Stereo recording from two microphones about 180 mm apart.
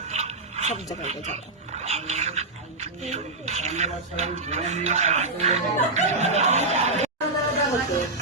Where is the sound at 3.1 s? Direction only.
40° right (ahead or behind).